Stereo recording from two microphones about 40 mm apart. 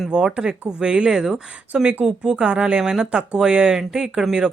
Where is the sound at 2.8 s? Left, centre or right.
Centre.